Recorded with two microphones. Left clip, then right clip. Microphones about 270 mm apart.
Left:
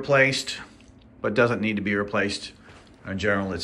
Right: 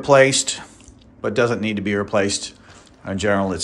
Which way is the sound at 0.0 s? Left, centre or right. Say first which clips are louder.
Right 7 dB; centre.